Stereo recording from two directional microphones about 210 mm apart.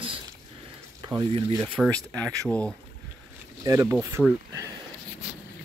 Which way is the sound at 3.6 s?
15° right (ahead or behind).